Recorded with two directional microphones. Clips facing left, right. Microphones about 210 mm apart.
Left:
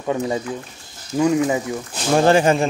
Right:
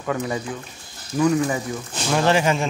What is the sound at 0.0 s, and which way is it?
Speech, 25° left (ahead or behind).